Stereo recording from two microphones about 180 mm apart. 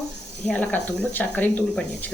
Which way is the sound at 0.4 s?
10° left (ahead or behind).